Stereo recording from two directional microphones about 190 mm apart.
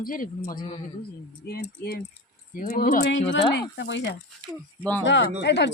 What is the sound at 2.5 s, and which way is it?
Speech, 40° left (ahead or behind).